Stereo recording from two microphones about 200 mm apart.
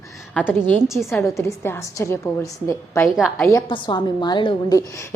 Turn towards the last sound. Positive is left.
turn(degrees=20)  # may be behind; listen again after turning